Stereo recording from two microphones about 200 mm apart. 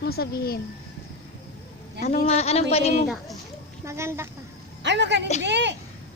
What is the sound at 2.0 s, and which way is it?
Speech, 40° left (ahead or behind).